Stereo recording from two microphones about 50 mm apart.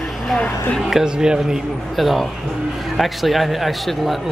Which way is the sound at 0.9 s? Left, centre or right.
Centre.